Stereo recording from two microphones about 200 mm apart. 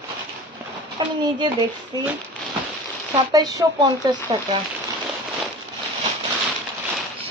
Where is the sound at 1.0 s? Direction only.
25° right (ahead or behind).